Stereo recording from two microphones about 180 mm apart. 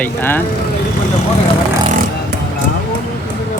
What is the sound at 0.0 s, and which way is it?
Speech, 10° left (ahead or behind).